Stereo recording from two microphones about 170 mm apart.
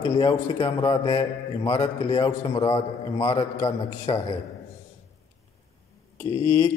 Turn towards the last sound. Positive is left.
turn(degrees=30)  # may be behind; listen again after turning